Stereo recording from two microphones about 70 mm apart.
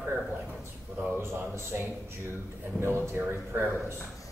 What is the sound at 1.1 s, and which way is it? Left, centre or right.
Speech, right.